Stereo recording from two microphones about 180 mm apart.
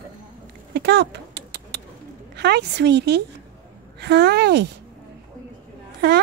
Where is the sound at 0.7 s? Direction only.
65° right (ahead or behind).